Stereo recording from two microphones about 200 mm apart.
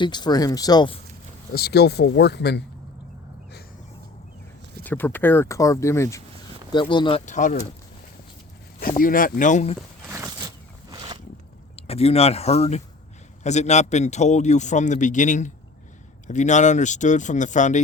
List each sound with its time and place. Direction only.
0.0 s speech: 20° left (ahead or behind)
1.5 s speech: 55° left (ahead or behind)
4.8 s speech: 10° left (ahead or behind); by 7.2 s 25° left (ahead or behind)
7.3 s a man's voice: 40° left (ahead or behind)
9.0 s speech: 45° left (ahead or behind)
10.1 s a sound: 15° right (ahead or behind)
11.8 s a man's voice: 30° left (ahead or behind)